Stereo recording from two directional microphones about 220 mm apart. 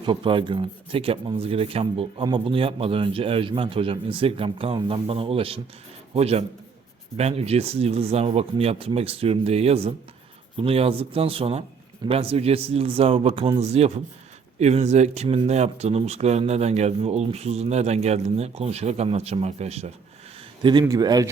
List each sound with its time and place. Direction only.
0.0 s speech: 20° right (ahead or behind)